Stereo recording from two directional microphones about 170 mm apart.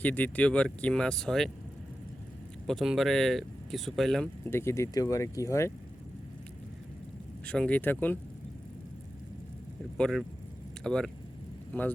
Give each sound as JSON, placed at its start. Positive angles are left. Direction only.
{"t": 0.0, "sound": "speech", "side_deg": 10}
{"t": 2.6, "sound": "speech", "side_deg": 0}
{"t": 4.4, "sound": "speech", "side_deg": 15}
{"t": 7.4, "sound": "speech", "side_deg": 5}
{"t": 10.0, "sound": "speech", "side_deg": 0}